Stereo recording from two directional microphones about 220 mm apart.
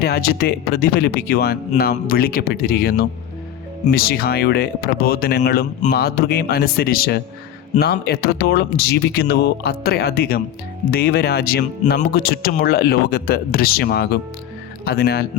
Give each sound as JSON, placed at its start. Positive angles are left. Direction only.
{"t": 0.0, "sound": "speech", "side_deg": 45}